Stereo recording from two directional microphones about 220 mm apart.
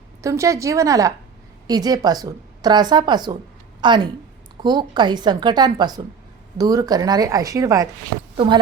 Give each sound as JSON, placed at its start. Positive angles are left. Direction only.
{"t": 0.2, "sound": "a woman's voice", "side_deg": -15}